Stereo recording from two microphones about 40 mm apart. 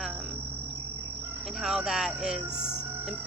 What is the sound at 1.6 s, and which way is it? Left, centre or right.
Speech, centre.